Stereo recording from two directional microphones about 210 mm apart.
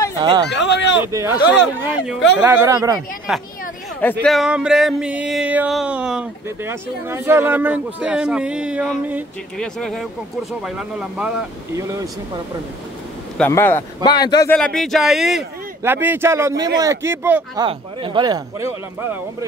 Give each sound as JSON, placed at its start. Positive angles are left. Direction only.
{"t": 0.5, "sound": "speech", "side_deg": 60}
{"t": 1.0, "sound": "a man's voice", "side_deg": -10}
{"t": 3.3, "sound": "speech", "side_deg": -5}
{"t": 4.0, "sound": "speech", "side_deg": 5}
{"t": 13.4, "sound": "speech", "side_deg": 10}
{"t": 14.5, "sound": "a man's voice", "side_deg": 5}
{"t": 17.6, "sound": "speech", "side_deg": -25}